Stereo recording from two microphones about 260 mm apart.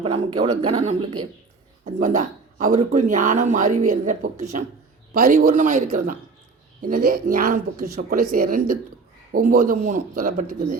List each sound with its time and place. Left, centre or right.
0.0 s speech: right